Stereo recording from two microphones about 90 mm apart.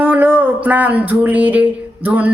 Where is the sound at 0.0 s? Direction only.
20° right (ahead or behind).